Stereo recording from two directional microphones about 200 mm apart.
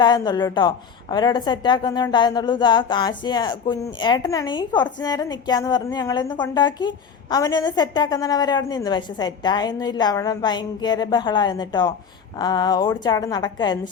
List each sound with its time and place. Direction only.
0.0 s a woman's voice: 20° left (ahead or behind)